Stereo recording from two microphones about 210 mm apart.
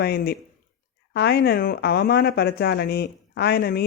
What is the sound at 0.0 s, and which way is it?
Speech, 50° left (ahead or behind).